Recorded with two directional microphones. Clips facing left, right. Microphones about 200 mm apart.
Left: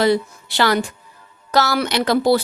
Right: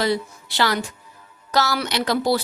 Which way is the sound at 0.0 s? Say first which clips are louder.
Left 5 dB; 55° left (ahead or behind).